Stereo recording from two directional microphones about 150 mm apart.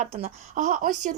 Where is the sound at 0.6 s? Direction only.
55° right (ahead or behind).